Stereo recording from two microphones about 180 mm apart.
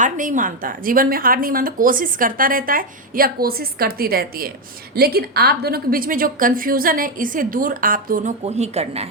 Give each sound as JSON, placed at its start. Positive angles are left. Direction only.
{"t": 0.0, "sound": "a woman's voice", "side_deg": -45}